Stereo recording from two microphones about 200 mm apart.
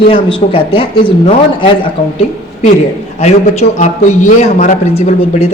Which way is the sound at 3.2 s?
35° left (ahead or behind).